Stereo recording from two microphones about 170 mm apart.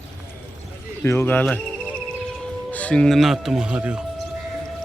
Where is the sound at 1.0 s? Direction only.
10° left (ahead or behind).